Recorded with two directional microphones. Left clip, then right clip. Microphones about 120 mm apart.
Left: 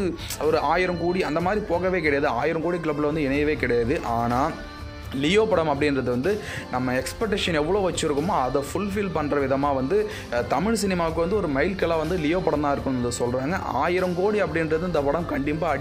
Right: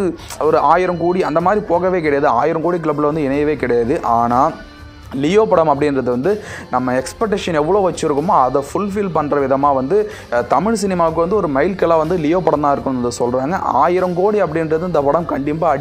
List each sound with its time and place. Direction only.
0.0 s speech: 20° right (ahead or behind)